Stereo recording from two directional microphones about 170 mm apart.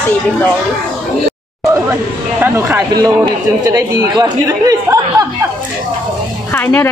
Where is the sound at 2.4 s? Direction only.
10° right (ahead or behind).